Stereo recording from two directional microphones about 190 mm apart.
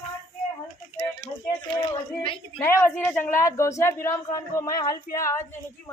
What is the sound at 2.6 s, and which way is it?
Speech, 15° left (ahead or behind).